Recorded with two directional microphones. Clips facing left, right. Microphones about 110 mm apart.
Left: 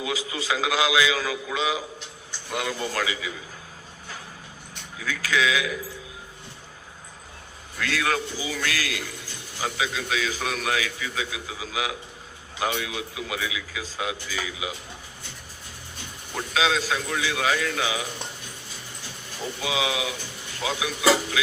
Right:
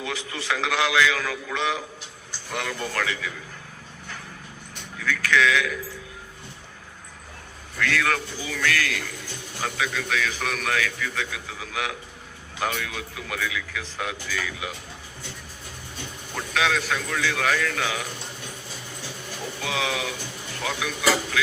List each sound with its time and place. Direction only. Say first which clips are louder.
0.0 s a man's voice: left 2 dB; 10° left (ahead or behind)
4.9 s a man's voice: right 3 dB; 15° left (ahead or behind)
7.8 s a man's voice: right 1 dB; 15° left (ahead or behind)
16.3 s a man's voice: left 1 dB; 20° left (ahead or behind)
19.6 s a man's voice: left 1 dB; 10° left (ahead or behind)